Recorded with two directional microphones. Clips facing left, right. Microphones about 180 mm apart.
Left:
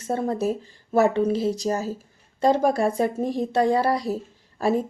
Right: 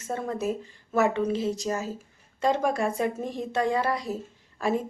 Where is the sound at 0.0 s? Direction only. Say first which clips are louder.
Left 5 dB; 35° left (ahead or behind).